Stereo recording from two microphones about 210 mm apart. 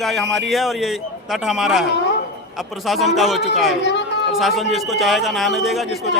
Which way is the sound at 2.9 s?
Centre (ahead or behind).